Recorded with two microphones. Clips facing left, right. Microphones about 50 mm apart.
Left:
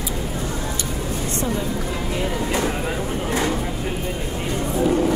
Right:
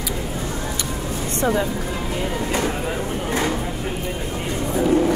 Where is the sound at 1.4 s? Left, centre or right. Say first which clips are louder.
Right 7 dB; right.